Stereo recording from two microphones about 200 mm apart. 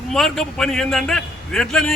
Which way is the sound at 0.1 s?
Centre (ahead or behind).